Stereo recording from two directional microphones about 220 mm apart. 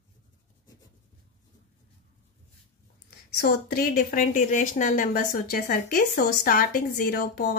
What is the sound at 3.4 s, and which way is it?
Speech, 45° left (ahead or behind).